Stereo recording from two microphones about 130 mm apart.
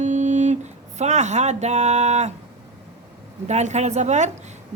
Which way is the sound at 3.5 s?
60° right (ahead or behind).